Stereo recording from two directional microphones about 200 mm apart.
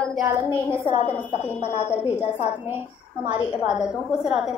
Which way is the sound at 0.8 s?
35° left (ahead or behind).